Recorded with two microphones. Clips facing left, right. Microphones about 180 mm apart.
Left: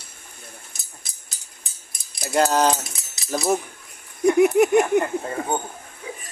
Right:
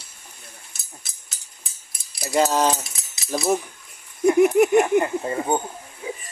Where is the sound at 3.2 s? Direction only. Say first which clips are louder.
Even; 5° right (ahead or behind).